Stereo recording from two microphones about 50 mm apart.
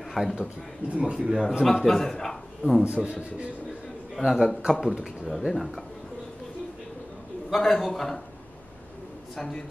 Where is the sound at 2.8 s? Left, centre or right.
Right.